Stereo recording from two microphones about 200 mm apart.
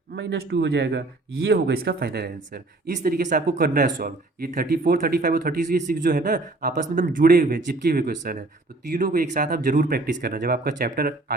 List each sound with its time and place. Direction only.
0.2 s speech: 60° right (ahead or behind)